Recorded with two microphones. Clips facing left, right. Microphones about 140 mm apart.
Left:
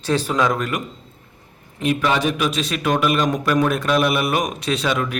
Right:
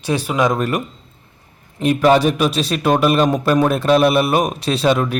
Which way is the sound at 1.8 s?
40° right (ahead or behind).